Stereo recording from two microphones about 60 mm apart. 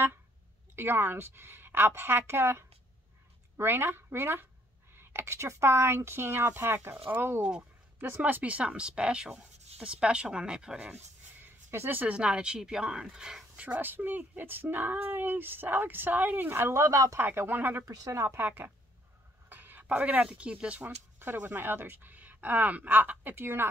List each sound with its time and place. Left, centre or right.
0.7 s speech: right
8.2 s speech: right
11.7 s speech: right
12.1 s speech: centre
13.6 s speech: right
16.8 s speech: right
17.2 s speech: right
17.8 s speech: right
18.3 s speech: right
21.2 s speech: right